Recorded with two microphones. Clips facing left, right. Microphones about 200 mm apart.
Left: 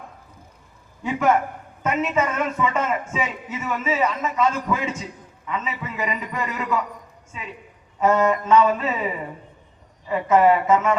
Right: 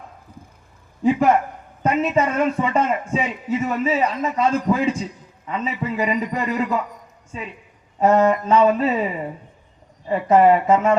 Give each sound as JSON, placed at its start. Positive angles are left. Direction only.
{"t": 1.8, "sound": "a man's voice", "side_deg": -35}
{"t": 10.1, "sound": "a man's voice", "side_deg": -35}